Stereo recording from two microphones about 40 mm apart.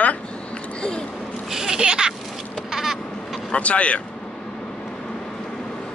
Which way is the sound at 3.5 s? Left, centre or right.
Left.